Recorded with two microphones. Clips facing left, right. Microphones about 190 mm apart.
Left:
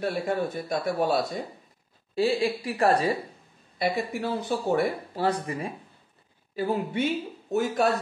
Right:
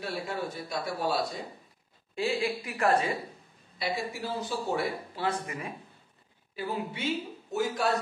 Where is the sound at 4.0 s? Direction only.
55° left (ahead or behind).